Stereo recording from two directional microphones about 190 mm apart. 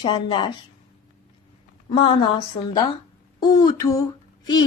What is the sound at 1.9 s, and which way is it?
Speech, 25° left (ahead or behind).